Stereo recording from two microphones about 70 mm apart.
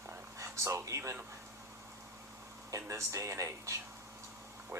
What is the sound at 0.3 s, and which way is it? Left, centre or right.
Speech, right.